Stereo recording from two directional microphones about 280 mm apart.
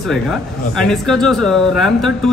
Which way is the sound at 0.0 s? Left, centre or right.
Centre.